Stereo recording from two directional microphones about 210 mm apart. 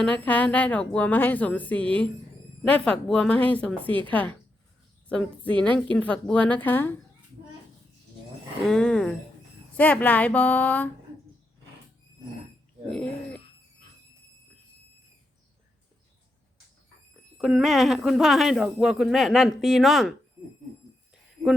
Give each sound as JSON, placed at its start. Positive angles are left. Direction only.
{"t": 0.0, "sound": "speech", "side_deg": 5}
{"t": 3.8, "sound": "a woman's voice", "side_deg": -25}
{"t": 4.1, "sound": "speech", "side_deg": 5}
{"t": 8.6, "sound": "speech", "side_deg": 5}
{"t": 17.3, "sound": "speech", "side_deg": 0}